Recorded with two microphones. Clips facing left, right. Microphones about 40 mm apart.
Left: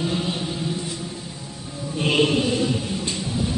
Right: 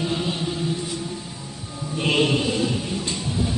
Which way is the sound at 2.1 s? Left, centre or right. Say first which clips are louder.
Left 1 dB; centre.